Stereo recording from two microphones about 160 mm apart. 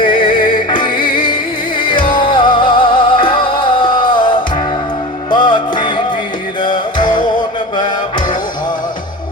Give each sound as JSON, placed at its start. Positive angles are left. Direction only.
{"t": 0.0, "sound": "music", "side_deg": 30}